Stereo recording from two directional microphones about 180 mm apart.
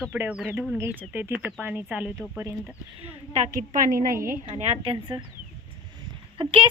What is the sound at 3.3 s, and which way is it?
A woman's voice, 40° right (ahead or behind).